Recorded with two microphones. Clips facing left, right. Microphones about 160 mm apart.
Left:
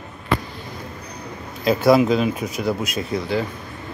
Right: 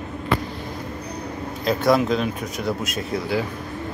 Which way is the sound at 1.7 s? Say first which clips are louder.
Left 4 dB; 5° left (ahead or behind).